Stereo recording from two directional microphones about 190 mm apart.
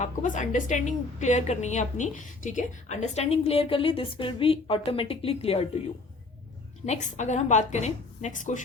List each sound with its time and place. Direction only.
0.0 s a woman's voice: 40° left (ahead or behind)
6.8 s a woman's voice: 40° left (ahead or behind)